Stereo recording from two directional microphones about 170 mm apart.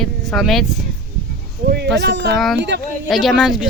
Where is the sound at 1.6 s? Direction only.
75° right (ahead or behind).